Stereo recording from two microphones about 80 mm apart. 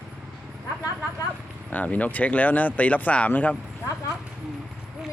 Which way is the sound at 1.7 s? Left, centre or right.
Centre.